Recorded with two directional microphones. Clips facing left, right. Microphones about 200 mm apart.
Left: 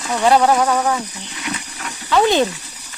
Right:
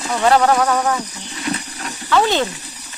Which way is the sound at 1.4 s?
35° right (ahead or behind).